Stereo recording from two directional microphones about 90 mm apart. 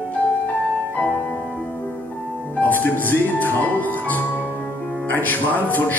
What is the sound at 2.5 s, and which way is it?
Music, 20° left (ahead or behind).